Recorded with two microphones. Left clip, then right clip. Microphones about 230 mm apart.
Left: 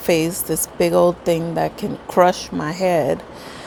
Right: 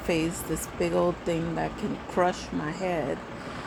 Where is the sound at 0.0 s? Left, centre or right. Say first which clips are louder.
Left 9 dB; left.